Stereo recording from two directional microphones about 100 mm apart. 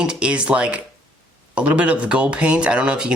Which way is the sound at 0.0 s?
10° right (ahead or behind).